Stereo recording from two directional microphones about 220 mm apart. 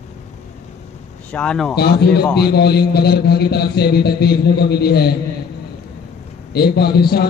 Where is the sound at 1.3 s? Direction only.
5° left (ahead or behind).